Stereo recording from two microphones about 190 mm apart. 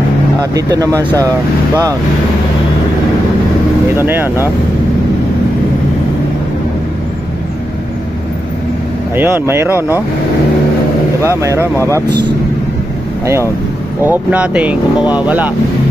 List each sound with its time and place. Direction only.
0.4 s speech: 20° right (ahead or behind)
3.9 s speech: 10° right (ahead or behind)
9.1 s speech: 10° right (ahead or behind)
11.2 s speech: 15° right (ahead or behind)
14.0 s speech: 10° right (ahead or behind)